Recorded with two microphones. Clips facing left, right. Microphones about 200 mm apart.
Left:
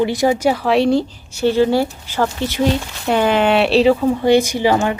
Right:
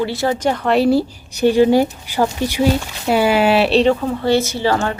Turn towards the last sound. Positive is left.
turn(degrees=15)  # may be behind; listen again after turning